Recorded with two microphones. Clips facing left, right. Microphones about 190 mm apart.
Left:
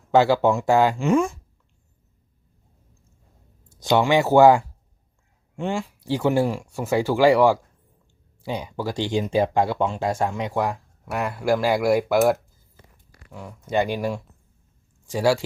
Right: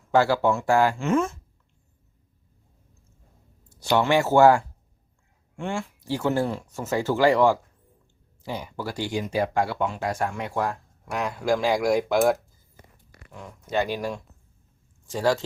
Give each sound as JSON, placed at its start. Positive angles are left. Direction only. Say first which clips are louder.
{"t": 0.1, "sound": "speech", "louder": "left 3 dB", "side_deg": 20}
{"t": 3.8, "sound": "speech", "louder": "left 2 dB", "side_deg": 15}